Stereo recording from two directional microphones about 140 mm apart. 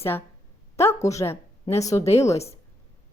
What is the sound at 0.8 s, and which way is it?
A woman's voice, 20° left (ahead or behind).